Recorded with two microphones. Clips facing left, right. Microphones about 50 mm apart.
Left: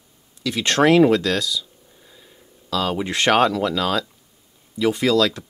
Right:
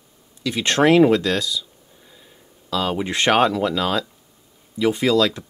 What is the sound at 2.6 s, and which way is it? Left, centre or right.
Speech, centre.